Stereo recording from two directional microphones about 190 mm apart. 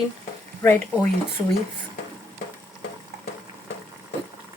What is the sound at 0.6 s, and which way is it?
Speech, 10° left (ahead or behind).